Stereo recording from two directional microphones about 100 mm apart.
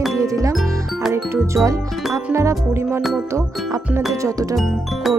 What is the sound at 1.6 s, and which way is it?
Speech, 5° right (ahead or behind).